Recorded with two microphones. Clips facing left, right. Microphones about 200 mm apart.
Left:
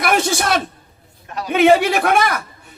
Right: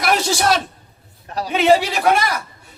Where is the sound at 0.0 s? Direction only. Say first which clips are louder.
Even; 55° left (ahead or behind).